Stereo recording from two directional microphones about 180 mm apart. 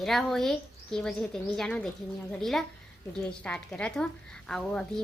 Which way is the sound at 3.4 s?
5° left (ahead or behind).